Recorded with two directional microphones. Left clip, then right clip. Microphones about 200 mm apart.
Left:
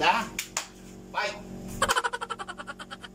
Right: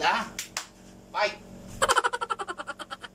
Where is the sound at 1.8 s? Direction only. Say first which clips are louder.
Right 2 dB; centre (ahead or behind).